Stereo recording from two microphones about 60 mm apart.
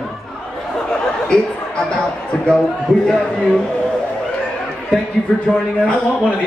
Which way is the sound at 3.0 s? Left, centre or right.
Centre.